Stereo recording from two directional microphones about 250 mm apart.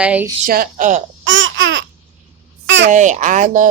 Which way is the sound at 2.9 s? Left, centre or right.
Right.